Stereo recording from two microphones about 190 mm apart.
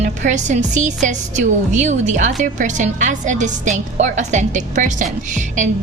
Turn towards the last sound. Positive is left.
turn(degrees=-40)  # may be behind; listen again after turning